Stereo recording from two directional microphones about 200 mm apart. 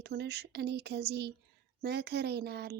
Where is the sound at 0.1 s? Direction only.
55° right (ahead or behind).